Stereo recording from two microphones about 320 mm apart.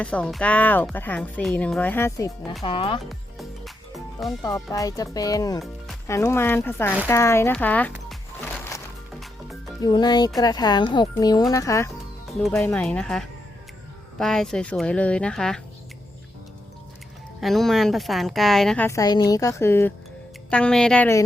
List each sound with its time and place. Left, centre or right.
0.0 s speech: centre
2.6 s speech: centre
3.0 s music: centre
4.4 s speech: centre
7.1 s music: centre
9.8 s speech: centre
17.4 s speech: centre